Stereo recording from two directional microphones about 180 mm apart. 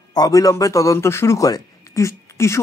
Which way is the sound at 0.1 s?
20° left (ahead or behind).